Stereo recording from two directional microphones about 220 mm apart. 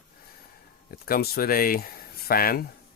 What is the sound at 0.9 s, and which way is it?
Speech, 40° left (ahead or behind).